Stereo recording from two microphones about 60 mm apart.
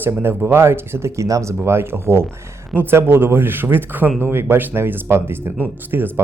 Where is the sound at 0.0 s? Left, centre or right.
Right.